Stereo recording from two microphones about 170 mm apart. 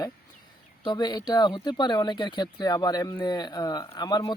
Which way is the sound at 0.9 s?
25° left (ahead or behind).